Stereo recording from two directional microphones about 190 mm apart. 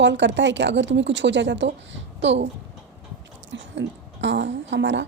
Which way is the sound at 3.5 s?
75° right (ahead or behind).